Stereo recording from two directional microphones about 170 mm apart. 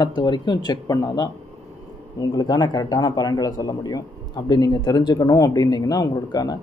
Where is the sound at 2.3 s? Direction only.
20° left (ahead or behind).